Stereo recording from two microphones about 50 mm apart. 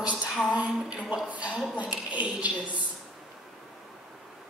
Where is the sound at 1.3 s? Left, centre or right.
Right.